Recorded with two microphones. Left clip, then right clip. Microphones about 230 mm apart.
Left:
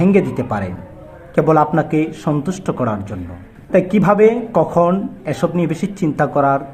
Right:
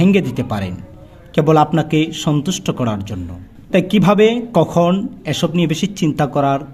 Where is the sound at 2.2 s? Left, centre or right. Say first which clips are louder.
Even; right.